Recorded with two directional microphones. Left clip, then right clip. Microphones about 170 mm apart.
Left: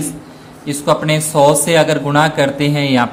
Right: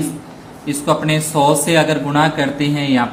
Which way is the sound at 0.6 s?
35° left (ahead or behind).